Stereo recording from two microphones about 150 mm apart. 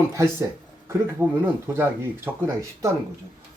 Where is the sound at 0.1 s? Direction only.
20° right (ahead or behind).